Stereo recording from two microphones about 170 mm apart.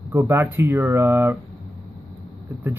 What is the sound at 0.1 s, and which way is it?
A man's voice, 15° right (ahead or behind).